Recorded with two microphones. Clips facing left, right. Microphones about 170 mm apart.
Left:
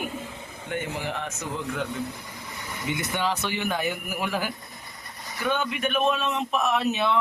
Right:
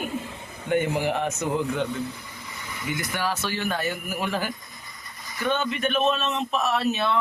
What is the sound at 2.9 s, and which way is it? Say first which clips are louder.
Speech: left 1 dB; 25° left (ahead or behind).